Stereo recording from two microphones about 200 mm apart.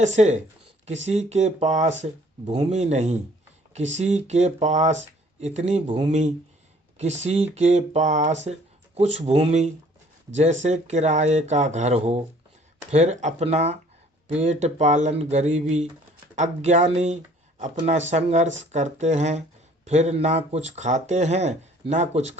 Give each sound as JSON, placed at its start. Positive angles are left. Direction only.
{"t": 0.0, "sound": "speech", "side_deg": -35}